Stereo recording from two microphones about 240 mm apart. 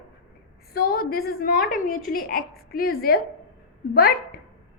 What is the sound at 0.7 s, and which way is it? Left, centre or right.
A woman's voice, left.